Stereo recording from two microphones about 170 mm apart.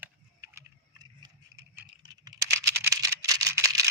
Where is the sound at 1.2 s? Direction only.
20° right (ahead or behind).